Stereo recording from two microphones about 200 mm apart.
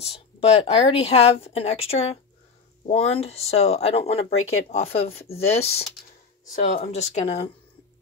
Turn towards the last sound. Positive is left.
turn(degrees=30)  # may be behind; listen again after turning